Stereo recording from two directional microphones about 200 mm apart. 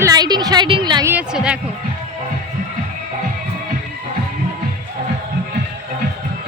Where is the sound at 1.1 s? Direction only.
5° right (ahead or behind).